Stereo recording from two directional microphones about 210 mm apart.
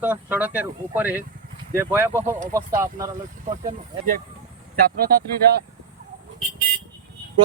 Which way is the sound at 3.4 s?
40° right (ahead or behind).